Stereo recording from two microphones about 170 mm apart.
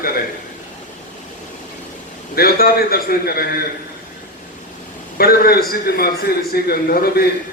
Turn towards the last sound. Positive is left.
turn(degrees=65)  # may be behind; listen again after turning